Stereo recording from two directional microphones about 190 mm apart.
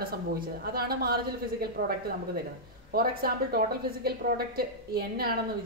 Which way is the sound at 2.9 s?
50° right (ahead or behind).